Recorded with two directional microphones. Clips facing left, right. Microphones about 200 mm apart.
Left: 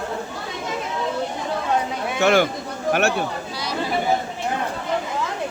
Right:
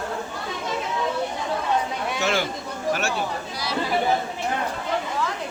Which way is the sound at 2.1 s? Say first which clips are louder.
Left 9 dB; 55° left (ahead or behind).